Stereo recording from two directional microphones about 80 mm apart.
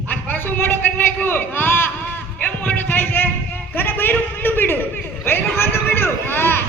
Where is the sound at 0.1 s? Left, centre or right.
Left.